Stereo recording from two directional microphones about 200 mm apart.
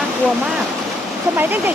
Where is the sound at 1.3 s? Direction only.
10° right (ahead or behind).